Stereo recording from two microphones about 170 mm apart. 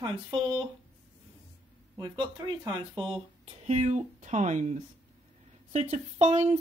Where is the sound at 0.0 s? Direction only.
30° right (ahead or behind).